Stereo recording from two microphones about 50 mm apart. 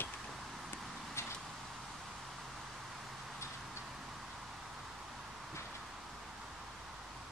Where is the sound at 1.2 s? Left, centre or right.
Left.